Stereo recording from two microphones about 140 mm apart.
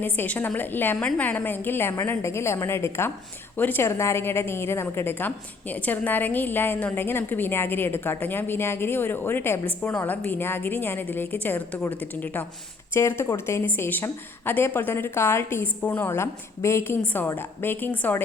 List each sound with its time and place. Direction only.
0.0 s a woman's voice: 15° left (ahead or behind)